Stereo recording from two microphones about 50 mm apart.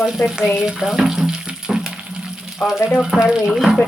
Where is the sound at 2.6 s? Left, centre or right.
Centre.